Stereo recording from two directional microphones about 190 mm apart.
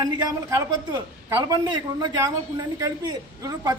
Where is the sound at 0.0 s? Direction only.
20° right (ahead or behind).